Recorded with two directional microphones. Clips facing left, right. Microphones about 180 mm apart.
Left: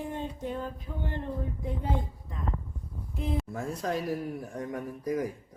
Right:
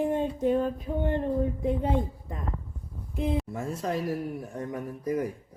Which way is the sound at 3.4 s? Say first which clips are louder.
Right 1 dB; centre (ahead or behind).